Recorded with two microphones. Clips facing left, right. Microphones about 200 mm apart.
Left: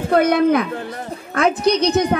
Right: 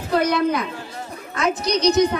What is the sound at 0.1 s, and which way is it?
A woman's voice, 55° left (ahead or behind).